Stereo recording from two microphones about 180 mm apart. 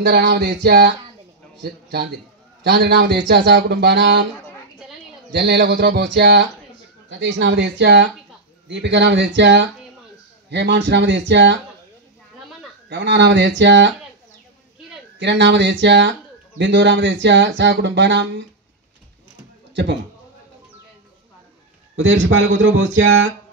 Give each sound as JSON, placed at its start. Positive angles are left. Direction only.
{"t": 0.0, "sound": "a sound", "side_deg": -60}
{"t": 1.6, "sound": "a man's voice", "side_deg": -60}
{"t": 2.6, "sound": "a sound", "side_deg": -60}
{"t": 3.3, "sound": "speech", "side_deg": -70}
{"t": 5.3, "sound": "speech", "side_deg": -70}
{"t": 7.1, "sound": "speech", "side_deg": -80}
{"t": 12.9, "sound": "speech", "side_deg": -75}
{"t": 15.1, "sound": "speech", "side_deg": -75}
{"t": 19.7, "sound": "a man's voice", "side_deg": -80}
{"t": 21.9, "sound": "speech", "side_deg": -90}